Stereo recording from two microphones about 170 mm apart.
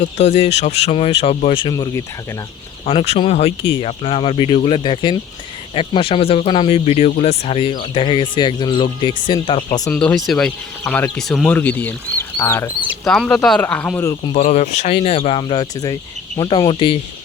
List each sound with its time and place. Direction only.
0.2 s speech: 40° left (ahead or behind)
1.7 s speech: 20° left (ahead or behind)
2.8 s speech: 40° left (ahead or behind)
9.9 s speech: 5° left (ahead or behind)
13.1 s speech: 5° left (ahead or behind)
14.3 s speech: 45° left (ahead or behind); by 17.0 s 30° left (ahead or behind)